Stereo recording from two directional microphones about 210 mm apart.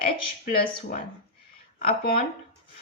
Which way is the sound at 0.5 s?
40° left (ahead or behind).